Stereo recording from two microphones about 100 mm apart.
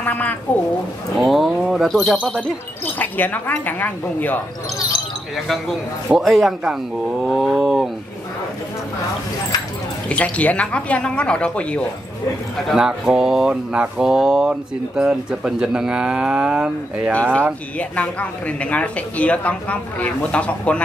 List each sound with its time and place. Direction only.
0.0 s speech: 15° left (ahead or behind)
1.2 s speech: centre (ahead or behind)
2.8 s speech: 15° left (ahead or behind)
5.3 s speech: centre (ahead or behind)
10.0 s speech: 15° left (ahead or behind)
12.7 s speech: 5° right (ahead or behind)
17.1 s speech: 10° left (ahead or behind)